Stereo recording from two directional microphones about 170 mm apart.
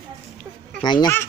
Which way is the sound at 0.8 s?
25° left (ahead or behind).